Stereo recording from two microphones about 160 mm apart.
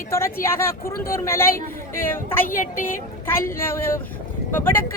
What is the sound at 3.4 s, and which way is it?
Speech, 15° left (ahead or behind).